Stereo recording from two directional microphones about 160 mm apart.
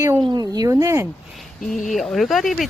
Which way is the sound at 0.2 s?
25° right (ahead or behind).